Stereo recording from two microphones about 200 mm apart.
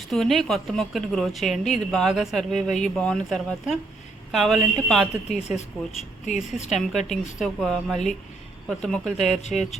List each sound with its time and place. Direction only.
0.1 s a woman's voice: centre (ahead or behind)
6.2 s speech: 35° left (ahead or behind)
6.7 s a woman's voice: centre (ahead or behind)
9.2 s speech: 35° left (ahead or behind)